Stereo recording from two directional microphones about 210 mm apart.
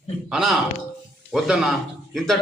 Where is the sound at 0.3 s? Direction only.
Centre (ahead or behind).